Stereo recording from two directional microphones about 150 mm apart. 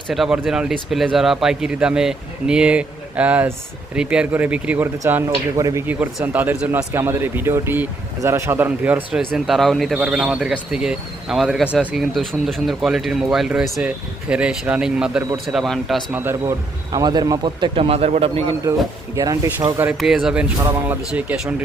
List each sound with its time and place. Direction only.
0.1 s speech: centre (ahead or behind)
5.3 s a man's voice: 25° right (ahead or behind)
5.9 s speech: 10° right (ahead or behind)
16.1 s a man's voice: 15° right (ahead or behind); by 18.5 s 40° right (ahead or behind)
19.1 s a man's voice: 20° right (ahead or behind)
19.8 s speech: 5° right (ahead or behind)